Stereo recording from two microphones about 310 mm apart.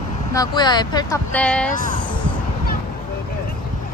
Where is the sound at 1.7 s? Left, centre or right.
Left.